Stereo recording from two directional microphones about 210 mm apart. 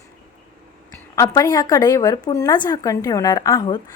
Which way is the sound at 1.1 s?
15° left (ahead or behind).